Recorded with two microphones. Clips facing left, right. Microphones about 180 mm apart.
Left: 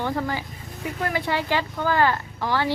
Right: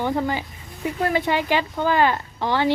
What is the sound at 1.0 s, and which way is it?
Speech, 20° right (ahead or behind).